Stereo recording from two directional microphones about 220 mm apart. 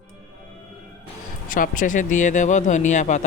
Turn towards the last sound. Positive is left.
turn(degrees=35)  # may be behind; listen again after turning